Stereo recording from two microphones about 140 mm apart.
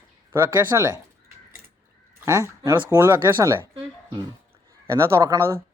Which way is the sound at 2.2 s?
20° right (ahead or behind).